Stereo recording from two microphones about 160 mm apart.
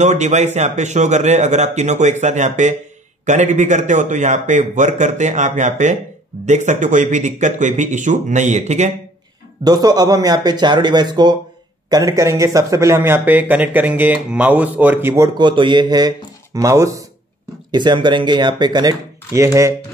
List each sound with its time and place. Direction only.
0.0 s a man's voice: 45° right (ahead or behind)
9.6 s speech: 25° right (ahead or behind)